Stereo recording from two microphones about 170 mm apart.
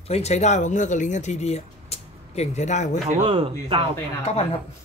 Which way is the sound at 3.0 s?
30° right (ahead or behind).